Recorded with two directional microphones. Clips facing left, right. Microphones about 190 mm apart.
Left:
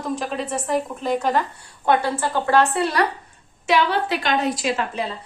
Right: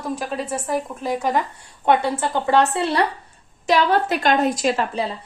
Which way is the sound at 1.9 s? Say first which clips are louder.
Right 1 dB; 20° right (ahead or behind).